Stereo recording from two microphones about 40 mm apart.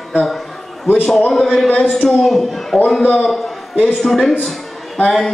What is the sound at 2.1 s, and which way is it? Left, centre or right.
Speech, centre.